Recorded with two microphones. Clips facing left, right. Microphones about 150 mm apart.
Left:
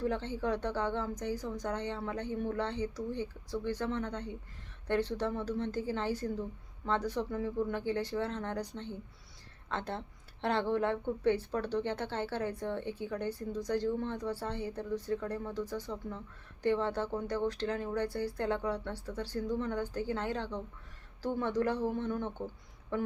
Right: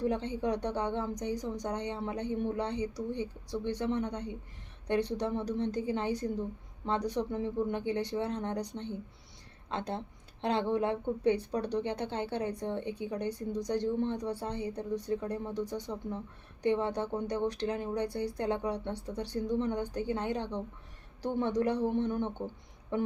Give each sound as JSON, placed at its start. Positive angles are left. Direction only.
{"t": 0.0, "sound": "a woman's voice", "side_deg": -15}